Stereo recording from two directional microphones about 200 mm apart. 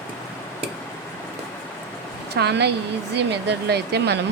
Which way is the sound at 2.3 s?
55° right (ahead or behind).